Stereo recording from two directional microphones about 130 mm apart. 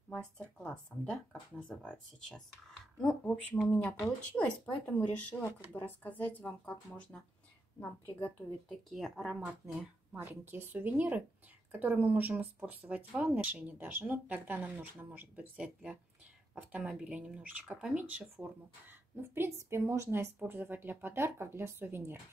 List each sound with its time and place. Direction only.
0.1 s speech: 10° left (ahead or behind)
8.9 s speech: centre (ahead or behind)
9.3 s speech: 10° right (ahead or behind)